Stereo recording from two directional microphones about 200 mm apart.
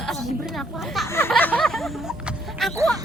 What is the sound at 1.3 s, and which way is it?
Music, 5° left (ahead or behind).